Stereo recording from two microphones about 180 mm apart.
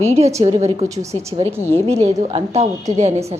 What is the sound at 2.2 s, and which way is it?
Speech, 35° right (ahead or behind).